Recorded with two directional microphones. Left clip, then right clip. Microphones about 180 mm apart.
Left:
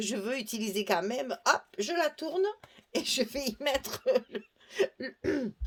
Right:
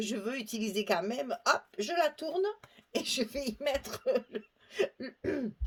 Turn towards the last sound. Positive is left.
turn(degrees=45)  # may be behind; listen again after turning